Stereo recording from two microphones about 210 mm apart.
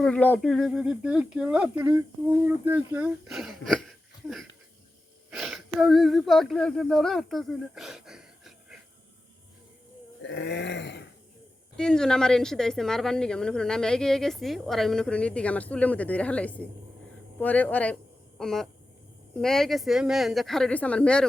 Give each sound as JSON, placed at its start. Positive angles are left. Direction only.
{"t": 0.0, "sound": "a woman's voice", "side_deg": 5}
{"t": 10.2, "sound": "a sound", "side_deg": 55}
{"t": 11.8, "sound": "a woman's voice", "side_deg": 5}